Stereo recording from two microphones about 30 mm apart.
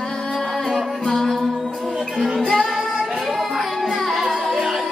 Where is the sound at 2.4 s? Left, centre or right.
Left.